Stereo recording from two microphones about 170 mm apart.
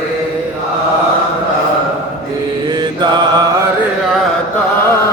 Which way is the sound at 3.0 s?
25° right (ahead or behind).